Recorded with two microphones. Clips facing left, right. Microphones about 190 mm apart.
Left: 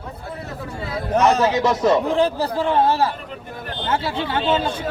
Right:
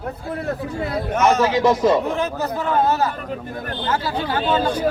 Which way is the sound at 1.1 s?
35° left (ahead or behind).